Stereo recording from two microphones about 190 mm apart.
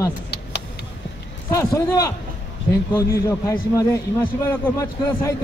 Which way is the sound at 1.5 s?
15° left (ahead or behind).